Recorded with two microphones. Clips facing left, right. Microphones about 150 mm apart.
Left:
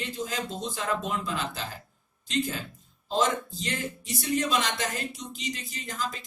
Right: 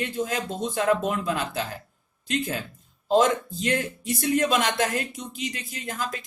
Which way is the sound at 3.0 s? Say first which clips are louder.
Right 6 dB; 55° right (ahead or behind).